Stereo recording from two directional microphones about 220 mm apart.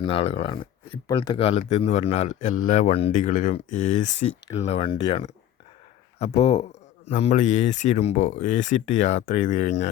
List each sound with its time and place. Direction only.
0.0 s a man's voice: 25° left (ahead or behind)